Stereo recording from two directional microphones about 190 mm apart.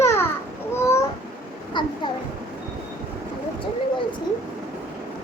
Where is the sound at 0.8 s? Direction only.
15° left (ahead or behind).